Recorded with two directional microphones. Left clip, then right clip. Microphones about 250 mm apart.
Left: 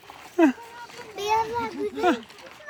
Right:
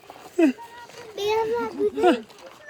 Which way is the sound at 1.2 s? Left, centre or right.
Centre.